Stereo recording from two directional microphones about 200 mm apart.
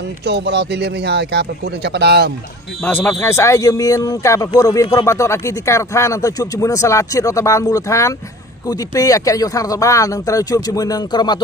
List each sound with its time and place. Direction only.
0.2 s speech: 55° right (ahead or behind)
2.8 s speech: 10° left (ahead or behind)